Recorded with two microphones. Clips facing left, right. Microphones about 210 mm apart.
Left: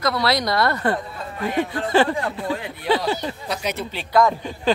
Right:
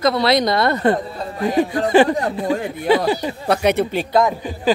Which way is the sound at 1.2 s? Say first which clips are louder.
Right 5 dB; 35° right (ahead or behind).